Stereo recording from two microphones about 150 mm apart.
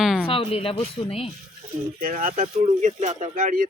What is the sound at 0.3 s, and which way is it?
Speech, 40° left (ahead or behind).